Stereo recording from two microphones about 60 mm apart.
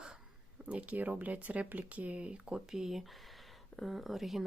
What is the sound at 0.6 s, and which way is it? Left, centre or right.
Speech, right.